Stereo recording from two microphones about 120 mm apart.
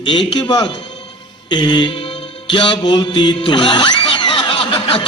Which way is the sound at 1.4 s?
40° left (ahead or behind).